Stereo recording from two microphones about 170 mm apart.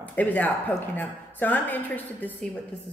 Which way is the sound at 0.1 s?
10° left (ahead or behind).